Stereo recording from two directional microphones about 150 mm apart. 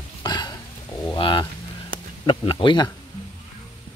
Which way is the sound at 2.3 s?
35° left (ahead or behind).